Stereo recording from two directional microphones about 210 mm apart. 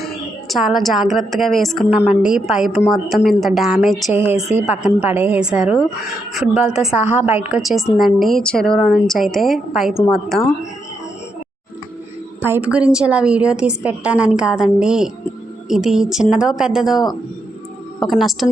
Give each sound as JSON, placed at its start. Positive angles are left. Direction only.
{"t": 0.0, "sound": "a woman's voice", "side_deg": 0}
{"t": 12.4, "sound": "a woman's voice", "side_deg": -10}
{"t": 18.0, "sound": "a woman's voice", "side_deg": 0}